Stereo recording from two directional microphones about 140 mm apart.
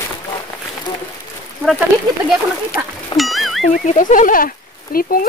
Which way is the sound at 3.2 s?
Centre (ahead or behind).